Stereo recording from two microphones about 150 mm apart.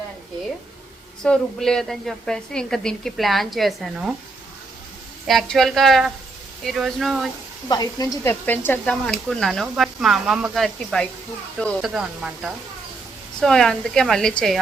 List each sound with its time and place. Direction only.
1.2 s a woman's voice: 5° left (ahead or behind)
5.2 s a woman's voice: centre (ahead or behind)
7.7 s speech: 25° left (ahead or behind)
8.3 s a woman's voice: 15° left (ahead or behind)